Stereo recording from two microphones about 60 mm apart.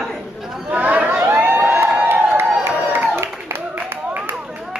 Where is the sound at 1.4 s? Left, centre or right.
Right.